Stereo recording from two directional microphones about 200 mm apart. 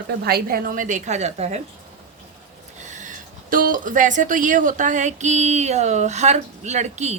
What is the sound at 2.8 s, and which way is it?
Speech, 40° right (ahead or behind).